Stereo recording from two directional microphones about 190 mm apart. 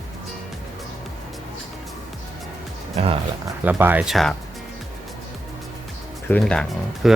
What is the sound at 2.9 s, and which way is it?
Music, 30° right (ahead or behind).